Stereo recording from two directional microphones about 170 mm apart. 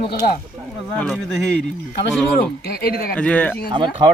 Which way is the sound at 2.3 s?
65° left (ahead or behind).